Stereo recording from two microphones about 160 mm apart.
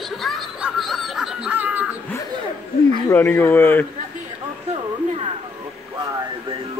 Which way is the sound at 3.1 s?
15° left (ahead or behind).